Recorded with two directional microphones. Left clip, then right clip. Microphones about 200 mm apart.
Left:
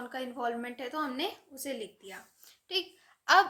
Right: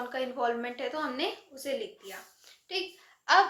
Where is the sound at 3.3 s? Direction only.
45° left (ahead or behind).